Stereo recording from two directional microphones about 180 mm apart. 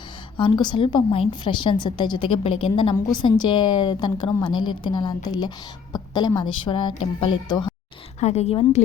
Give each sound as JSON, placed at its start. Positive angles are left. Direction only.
{"t": 0.3, "sound": "a woman's voice", "side_deg": 25}
{"t": 8.2, "sound": "speech", "side_deg": 35}